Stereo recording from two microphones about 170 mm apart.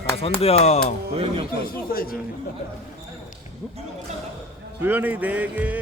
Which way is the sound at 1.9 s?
60° left (ahead or behind).